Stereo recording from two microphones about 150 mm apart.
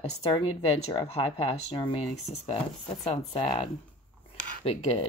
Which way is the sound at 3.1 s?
40° left (ahead or behind).